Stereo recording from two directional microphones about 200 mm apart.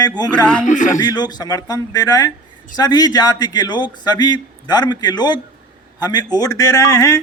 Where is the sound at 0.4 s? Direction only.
5° left (ahead or behind).